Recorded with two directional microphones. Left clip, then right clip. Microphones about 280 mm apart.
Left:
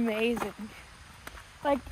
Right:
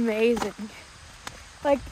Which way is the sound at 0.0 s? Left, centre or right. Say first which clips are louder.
Right 6 dB; centre.